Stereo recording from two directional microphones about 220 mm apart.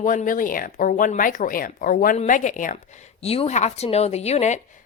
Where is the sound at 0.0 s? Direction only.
35° left (ahead or behind).